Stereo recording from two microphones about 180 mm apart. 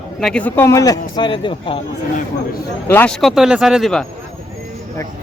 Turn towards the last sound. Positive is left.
turn(degrees=0)  # may be behind; listen again after turning